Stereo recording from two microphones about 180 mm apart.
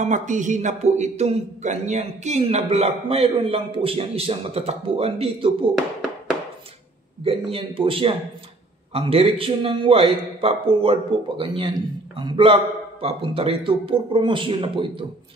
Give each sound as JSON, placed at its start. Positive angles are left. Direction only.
{"t": 0.0, "sound": "speech", "side_deg": -45}
{"t": 7.5, "sound": "a man's voice", "side_deg": -30}